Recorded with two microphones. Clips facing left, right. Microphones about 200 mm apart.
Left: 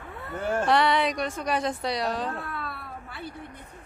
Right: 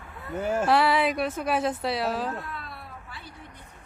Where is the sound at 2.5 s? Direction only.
60° left (ahead or behind).